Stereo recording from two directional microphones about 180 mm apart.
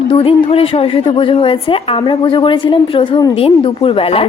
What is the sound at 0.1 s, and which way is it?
A woman's voice, 30° left (ahead or behind).